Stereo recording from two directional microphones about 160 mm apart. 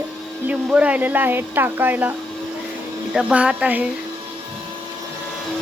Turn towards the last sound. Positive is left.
turn(degrees=-10)  # may be behind; listen again after turning